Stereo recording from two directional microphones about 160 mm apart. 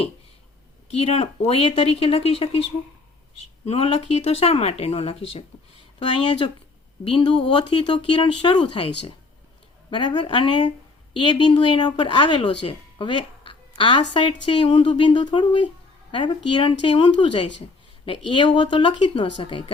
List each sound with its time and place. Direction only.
0.9 s speech: 40° left (ahead or behind)
3.7 s speech: 35° left (ahead or behind)
7.0 s speech: 30° left (ahead or behind)
9.9 s a woman's voice: 30° left (ahead or behind)
12.6 s a sound: 30° left (ahead or behind)
14.1 s speech: 30° left (ahead or behind)